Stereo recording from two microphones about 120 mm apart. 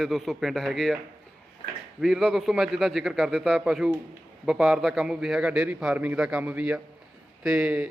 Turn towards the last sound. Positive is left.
turn(degrees=-10)  # may be behind; listen again after turning